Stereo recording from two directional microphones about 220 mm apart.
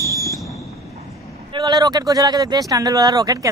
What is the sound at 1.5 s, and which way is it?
A man's voice, 20° right (ahead or behind).